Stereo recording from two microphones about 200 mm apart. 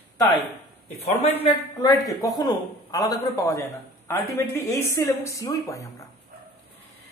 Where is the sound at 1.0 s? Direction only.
30° left (ahead or behind).